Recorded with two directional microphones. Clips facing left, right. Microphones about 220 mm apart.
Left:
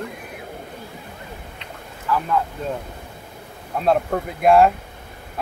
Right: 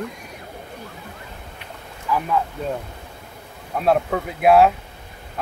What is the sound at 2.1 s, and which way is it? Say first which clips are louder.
Speech: even; 15° right (ahead or behind).